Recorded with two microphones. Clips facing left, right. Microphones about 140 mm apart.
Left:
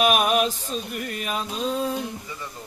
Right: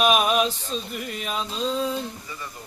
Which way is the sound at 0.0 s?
5° left (ahead or behind).